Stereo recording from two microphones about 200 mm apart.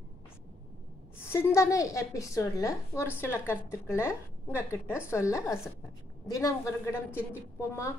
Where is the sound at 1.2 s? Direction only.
10° left (ahead or behind).